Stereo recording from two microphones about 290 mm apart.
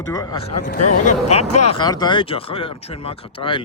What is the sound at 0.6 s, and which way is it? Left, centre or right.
Speech, left.